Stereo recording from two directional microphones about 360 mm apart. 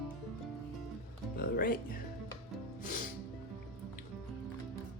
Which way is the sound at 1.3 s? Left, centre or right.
Left.